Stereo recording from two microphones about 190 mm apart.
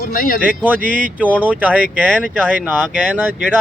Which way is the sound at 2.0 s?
5° left (ahead or behind).